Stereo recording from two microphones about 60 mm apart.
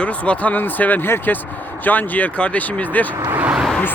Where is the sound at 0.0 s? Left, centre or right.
Left.